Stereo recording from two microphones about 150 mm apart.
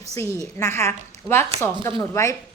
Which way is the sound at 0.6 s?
20° left (ahead or behind).